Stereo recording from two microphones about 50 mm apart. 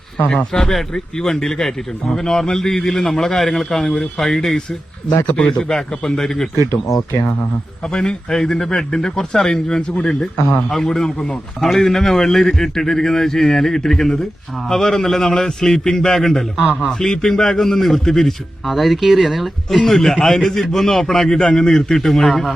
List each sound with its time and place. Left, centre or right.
0.5 s a man's voice: centre
5.2 s a man's voice: left; by 6.5 s centre
6.6 s speech: left
7.9 s a man's voice: centre
10.7 s a man's voice: centre
16.6 s a man's voice: right
17.0 s a man's voice: centre